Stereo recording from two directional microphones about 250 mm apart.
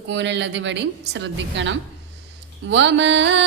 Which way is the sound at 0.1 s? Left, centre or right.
Right.